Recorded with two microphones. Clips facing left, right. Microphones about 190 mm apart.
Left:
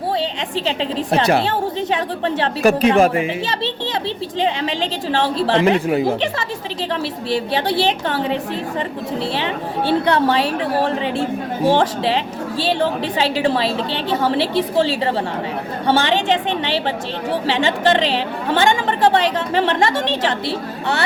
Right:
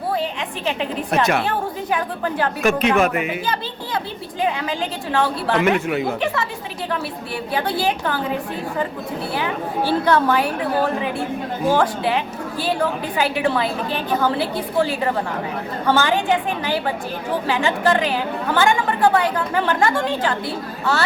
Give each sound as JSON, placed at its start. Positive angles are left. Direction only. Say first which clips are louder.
{"t": 1.1, "sound": "a woman's voice", "louder": "left 3 dB", "side_deg": 30}
{"t": 4.4, "sound": "a woman's voice", "louder": "left 1 dB", "side_deg": 25}
{"t": 7.3, "sound": "a woman's voice", "louder": "left 5 dB", "side_deg": 90}
{"t": 7.9, "sound": "a woman's voice", "louder": "left 2 dB", "side_deg": 25}
{"t": 9.4, "sound": "a woman's voice", "louder": "left 1 dB", "side_deg": 30}
{"t": 11.6, "sound": "a woman's voice", "louder": "left 2 dB", "side_deg": 30}
{"t": 13.3, "sound": "a woman's voice", "louder": "left 3 dB", "side_deg": 30}
{"t": 14.8, "sound": "a woman's voice", "louder": "right 1 dB", "side_deg": 30}
{"t": 19.9, "sound": "a woman's voice", "louder": "left 1 dB", "side_deg": 80}